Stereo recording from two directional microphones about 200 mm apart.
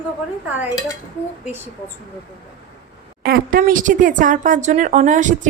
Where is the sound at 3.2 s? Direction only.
45° right (ahead or behind).